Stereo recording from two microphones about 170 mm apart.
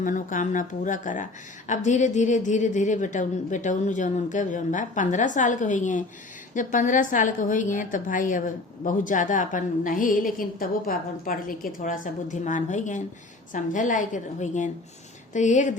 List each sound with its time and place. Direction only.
0.0 s a woman's voice: 50° left (ahead or behind)